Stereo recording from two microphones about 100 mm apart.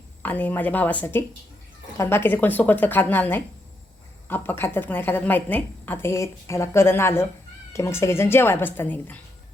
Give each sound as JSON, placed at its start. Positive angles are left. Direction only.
{"t": 0.2, "sound": "a woman's voice", "side_deg": 15}